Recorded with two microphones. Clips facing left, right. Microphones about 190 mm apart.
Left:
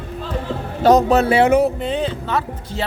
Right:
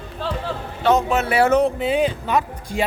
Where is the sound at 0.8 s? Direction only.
40° left (ahead or behind).